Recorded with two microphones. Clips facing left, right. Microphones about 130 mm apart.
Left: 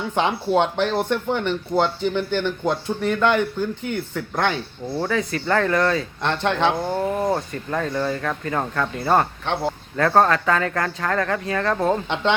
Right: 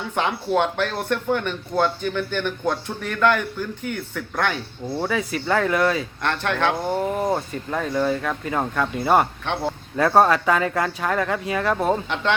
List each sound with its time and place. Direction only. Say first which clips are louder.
0.2 s speech: left 2 dB; 20° left (ahead or behind)
4.9 s speech: left 1 dB; 10° right (ahead or behind)
6.2 s speech: left 2 dB; 20° left (ahead or behind)
6.8 s speech: even; 5° right (ahead or behind)